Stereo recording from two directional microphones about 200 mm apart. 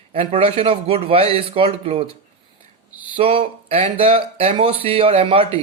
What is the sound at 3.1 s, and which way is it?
Speech, 30° right (ahead or behind).